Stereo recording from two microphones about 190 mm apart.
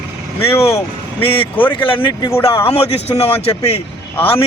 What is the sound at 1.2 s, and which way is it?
A man's voice, 30° left (ahead or behind).